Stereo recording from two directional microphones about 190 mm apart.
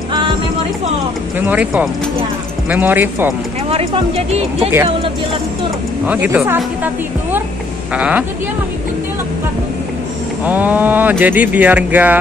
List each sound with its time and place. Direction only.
1.4 s speech: 10° right (ahead or behind)
3.7 s speech: 30° right (ahead or behind)
6.0 s speech: 10° right (ahead or behind)
7.9 s speech: 5° right (ahead or behind)
10.4 s speech: 10° right (ahead or behind)